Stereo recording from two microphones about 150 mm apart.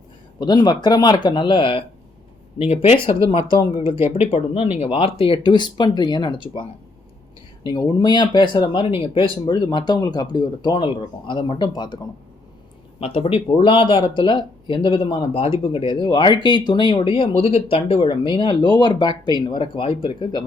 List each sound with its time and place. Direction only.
0.3 s speech: 30° left (ahead or behind)
3.8 s speech: 15° right (ahead or behind)
4.2 s speech: 45° left (ahead or behind)
7.7 s speech: 30° left (ahead or behind)
13.0 s speech: 40° left (ahead or behind)